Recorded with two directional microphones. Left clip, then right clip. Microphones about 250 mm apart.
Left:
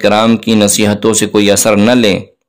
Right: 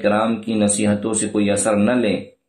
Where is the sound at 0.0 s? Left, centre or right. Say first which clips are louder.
Left 9 dB; left.